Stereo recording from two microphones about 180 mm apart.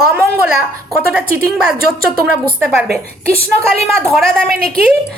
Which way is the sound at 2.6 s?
10° right (ahead or behind).